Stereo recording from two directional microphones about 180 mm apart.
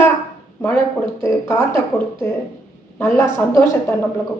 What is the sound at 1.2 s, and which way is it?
A woman's voice, 15° left (ahead or behind).